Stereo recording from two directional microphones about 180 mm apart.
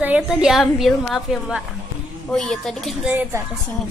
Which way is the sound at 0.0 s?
5° right (ahead or behind).